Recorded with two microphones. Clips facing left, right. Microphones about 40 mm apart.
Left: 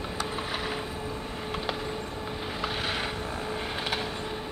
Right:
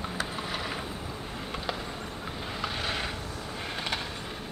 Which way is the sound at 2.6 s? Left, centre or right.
Centre.